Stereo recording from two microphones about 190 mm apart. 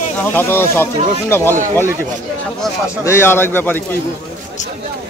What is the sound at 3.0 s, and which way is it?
Speech, 15° left (ahead or behind).